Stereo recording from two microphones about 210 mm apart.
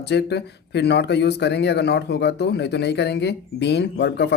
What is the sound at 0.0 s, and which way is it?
Speech, 55° left (ahead or behind).